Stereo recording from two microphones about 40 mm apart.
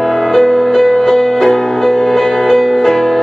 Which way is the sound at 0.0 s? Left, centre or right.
Centre.